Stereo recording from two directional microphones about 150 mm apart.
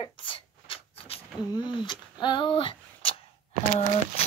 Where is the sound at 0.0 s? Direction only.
35° left (ahead or behind).